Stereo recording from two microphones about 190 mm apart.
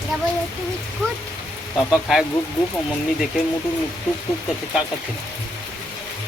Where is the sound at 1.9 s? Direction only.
Centre (ahead or behind).